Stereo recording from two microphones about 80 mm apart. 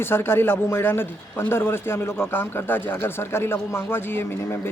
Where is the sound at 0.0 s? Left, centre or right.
Left.